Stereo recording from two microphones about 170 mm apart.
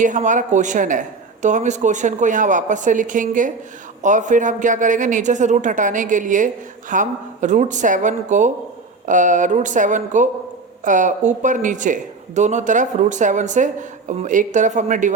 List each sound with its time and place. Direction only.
0.0 s a man's voice: 50° right (ahead or behind)